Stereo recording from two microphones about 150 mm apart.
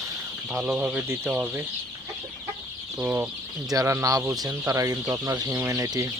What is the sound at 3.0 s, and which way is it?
Speech, 10° right (ahead or behind).